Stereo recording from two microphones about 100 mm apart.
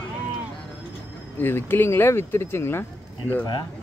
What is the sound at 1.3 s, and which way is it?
Speech, 20° left (ahead or behind).